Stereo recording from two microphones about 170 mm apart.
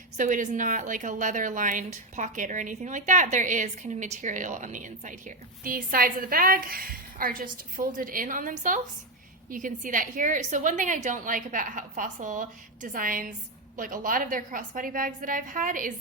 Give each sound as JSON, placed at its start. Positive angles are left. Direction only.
{"t": 0.2, "sound": "a woman's voice", "side_deg": -45}